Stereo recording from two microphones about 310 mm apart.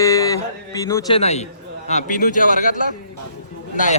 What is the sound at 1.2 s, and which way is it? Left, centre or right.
Speech, left.